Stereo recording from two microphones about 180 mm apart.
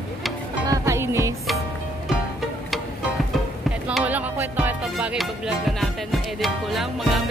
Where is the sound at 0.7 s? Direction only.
15° right (ahead or behind).